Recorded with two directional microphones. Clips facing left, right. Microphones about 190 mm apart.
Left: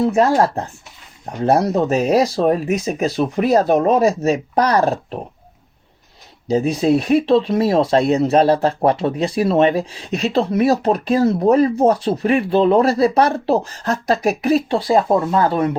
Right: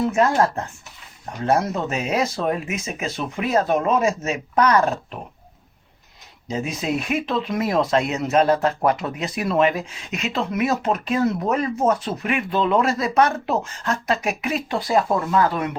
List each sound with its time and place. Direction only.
0.0 s speech: 35° left (ahead or behind)
6.5 s speech: 35° left (ahead or behind)